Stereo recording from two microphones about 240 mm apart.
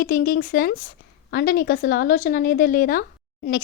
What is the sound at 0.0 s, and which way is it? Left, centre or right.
Speech, left.